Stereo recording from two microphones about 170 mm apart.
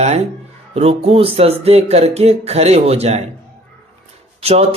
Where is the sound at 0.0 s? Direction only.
40° right (ahead or behind).